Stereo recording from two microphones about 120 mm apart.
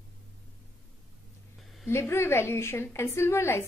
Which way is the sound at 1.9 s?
20° left (ahead or behind).